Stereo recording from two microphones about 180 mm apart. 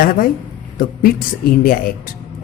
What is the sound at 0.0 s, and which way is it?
Speech, 50° left (ahead or behind).